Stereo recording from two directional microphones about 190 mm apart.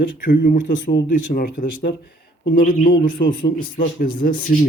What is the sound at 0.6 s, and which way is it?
Speech, 75° left (ahead or behind).